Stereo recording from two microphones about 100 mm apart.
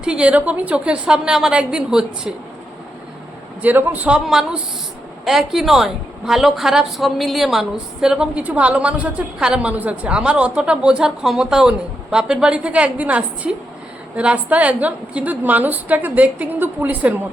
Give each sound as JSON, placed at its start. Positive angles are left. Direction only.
{"t": 0.0, "sound": "a woman's voice", "side_deg": -10}
{"t": 3.6, "sound": "a woman's voice", "side_deg": -20}